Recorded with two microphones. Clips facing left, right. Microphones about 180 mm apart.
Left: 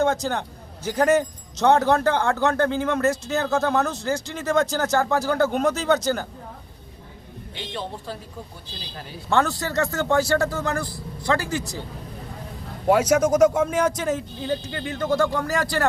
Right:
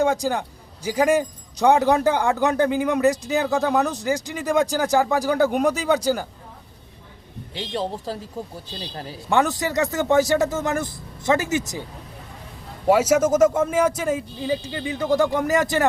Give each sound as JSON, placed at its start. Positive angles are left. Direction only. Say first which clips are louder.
{"t": 0.0, "sound": "a man's voice", "louder": "right 1 dB", "side_deg": -10}
{"t": 7.8, "sound": "speech", "louder": "right 5 dB", "side_deg": -35}
{"t": 9.3, "sound": "a man's voice", "louder": "right 1 dB", "side_deg": -15}
{"t": 12.9, "sound": "a man's voice", "louder": "right 1 dB", "side_deg": -5}